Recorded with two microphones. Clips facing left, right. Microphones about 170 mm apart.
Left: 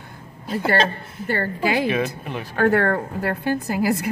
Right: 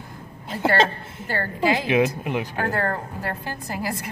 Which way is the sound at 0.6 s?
20° right (ahead or behind).